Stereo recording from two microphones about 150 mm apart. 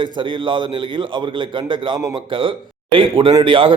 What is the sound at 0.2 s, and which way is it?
A man's voice, 35° right (ahead or behind).